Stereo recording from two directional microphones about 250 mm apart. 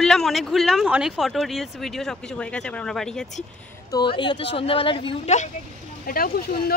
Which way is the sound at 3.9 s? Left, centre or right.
Centre.